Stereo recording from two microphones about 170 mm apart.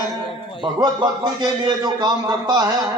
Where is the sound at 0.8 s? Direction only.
25° right (ahead or behind).